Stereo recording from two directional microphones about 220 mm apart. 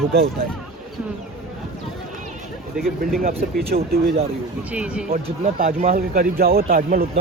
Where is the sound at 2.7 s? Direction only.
Centre (ahead or behind).